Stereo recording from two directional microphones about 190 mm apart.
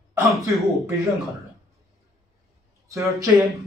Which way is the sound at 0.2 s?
Centre (ahead or behind).